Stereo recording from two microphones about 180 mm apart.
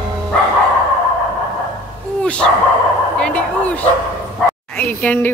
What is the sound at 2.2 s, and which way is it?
Speech, 5° left (ahead or behind).